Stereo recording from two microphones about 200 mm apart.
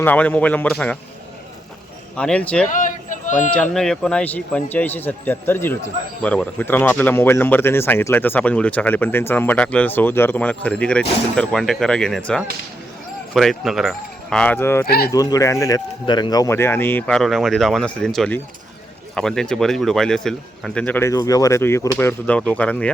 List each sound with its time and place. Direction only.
0.0 s speech: 10° left (ahead or behind)
2.1 s speech: 5° left (ahead or behind)
2.6 s a sound: 40° left (ahead or behind)
3.5 s speech: 5° left (ahead or behind)
14.8 s speech: 50° left (ahead or behind)
15.1 s speech: 20° left (ahead or behind)